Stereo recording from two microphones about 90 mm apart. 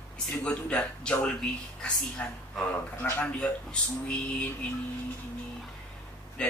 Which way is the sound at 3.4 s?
10° left (ahead or behind).